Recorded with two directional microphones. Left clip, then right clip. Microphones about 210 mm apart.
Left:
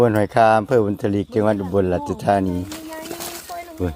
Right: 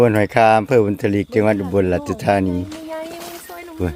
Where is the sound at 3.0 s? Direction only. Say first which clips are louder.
Even; 50° left (ahead or behind).